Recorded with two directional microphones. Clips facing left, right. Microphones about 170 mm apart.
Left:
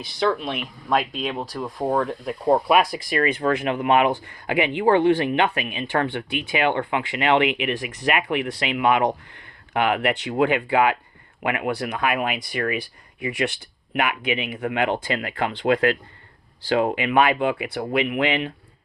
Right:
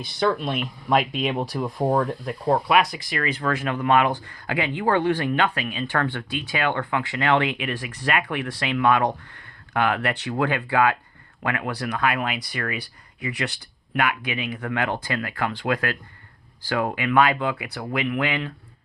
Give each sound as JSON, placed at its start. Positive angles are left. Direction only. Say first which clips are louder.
{"t": 0.0, "sound": "speech", "louder": "even", "side_deg": 0}
{"t": 2.9, "sound": "speech", "louder": "left 5 dB", "side_deg": 30}